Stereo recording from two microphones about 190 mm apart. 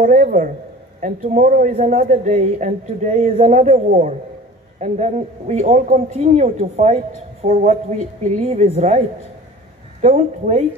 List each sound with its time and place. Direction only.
0.0 s a sound: 45° right (ahead or behind)
1.0 s a man's voice: 40° right (ahead or behind)
10.0 s a man's voice: 35° right (ahead or behind)